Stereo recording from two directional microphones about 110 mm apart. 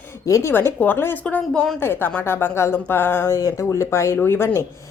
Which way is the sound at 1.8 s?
20° left (ahead or behind).